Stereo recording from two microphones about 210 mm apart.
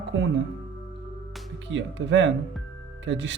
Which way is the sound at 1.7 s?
60° right (ahead or behind).